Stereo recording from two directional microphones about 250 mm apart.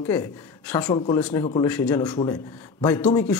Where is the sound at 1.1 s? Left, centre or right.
Centre.